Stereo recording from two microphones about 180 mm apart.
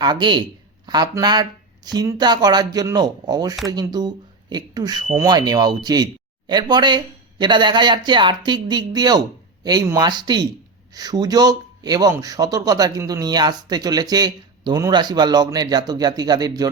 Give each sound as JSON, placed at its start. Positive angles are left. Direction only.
{"t": 0.0, "sound": "speech", "side_deg": -25}